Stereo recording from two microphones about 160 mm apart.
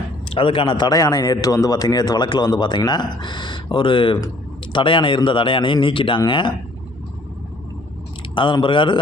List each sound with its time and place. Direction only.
0.3 s speech: 35° left (ahead or behind)
8.4 s speech: 30° left (ahead or behind)